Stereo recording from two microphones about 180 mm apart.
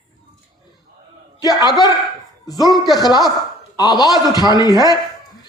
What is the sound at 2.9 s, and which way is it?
A man's voice, 20° left (ahead or behind).